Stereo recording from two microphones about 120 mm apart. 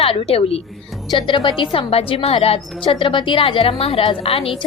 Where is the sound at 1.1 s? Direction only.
40° left (ahead or behind).